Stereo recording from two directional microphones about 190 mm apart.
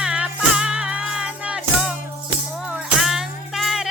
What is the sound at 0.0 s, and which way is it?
Music, 5° right (ahead or behind).